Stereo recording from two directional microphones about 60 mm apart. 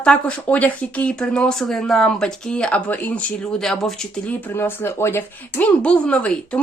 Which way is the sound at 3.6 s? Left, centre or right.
Centre.